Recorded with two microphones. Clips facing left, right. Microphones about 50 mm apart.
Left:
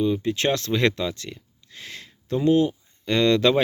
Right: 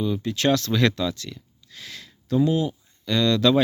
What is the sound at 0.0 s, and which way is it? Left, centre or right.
Speech, left.